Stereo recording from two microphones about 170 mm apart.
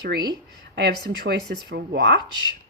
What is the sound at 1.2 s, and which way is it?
Speech, 65° right (ahead or behind).